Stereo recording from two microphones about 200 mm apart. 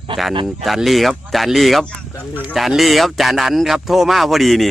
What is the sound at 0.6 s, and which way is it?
Speech, centre (ahead or behind).